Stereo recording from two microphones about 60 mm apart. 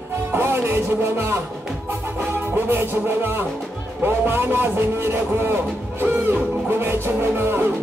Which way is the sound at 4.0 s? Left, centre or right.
Right.